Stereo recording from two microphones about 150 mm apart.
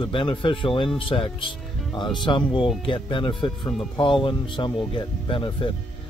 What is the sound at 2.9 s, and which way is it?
Speech, 35° left (ahead or behind).